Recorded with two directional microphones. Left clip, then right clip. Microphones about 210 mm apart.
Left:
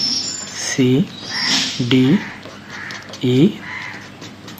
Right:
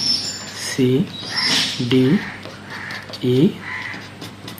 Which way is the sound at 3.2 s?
45° left (ahead or behind).